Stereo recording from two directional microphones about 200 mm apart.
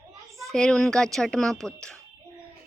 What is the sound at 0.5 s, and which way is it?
A woman's voice, 5° left (ahead or behind).